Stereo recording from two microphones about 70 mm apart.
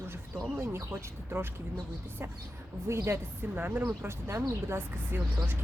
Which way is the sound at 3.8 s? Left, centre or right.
Right.